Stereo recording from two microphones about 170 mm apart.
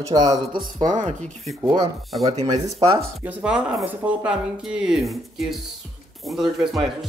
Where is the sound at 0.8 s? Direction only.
50° right (ahead or behind).